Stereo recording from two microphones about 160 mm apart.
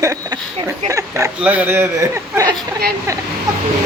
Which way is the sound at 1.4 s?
10° right (ahead or behind).